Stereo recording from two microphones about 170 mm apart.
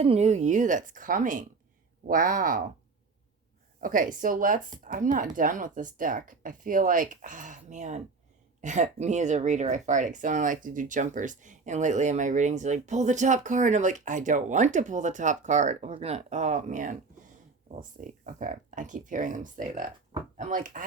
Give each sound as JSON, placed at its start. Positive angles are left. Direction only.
{"t": 0.0, "sound": "speech", "side_deg": -40}
{"t": 3.8, "sound": "speech", "side_deg": -55}